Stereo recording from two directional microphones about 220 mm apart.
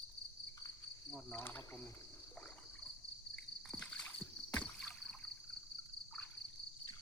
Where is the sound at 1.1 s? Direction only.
10° left (ahead or behind).